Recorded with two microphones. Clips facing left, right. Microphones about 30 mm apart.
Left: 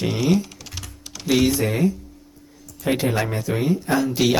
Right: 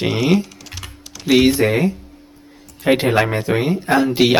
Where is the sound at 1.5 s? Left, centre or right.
Right.